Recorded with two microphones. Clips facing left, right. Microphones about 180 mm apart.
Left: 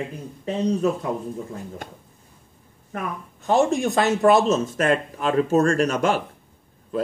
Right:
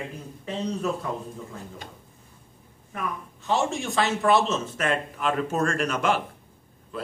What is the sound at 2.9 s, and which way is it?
A man's voice, 45° left (ahead or behind).